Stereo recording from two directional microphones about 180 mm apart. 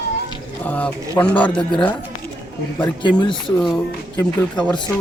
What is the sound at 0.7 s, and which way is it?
Speech, 10° left (ahead or behind).